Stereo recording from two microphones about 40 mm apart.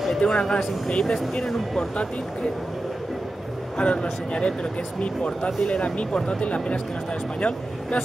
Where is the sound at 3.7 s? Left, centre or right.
Left.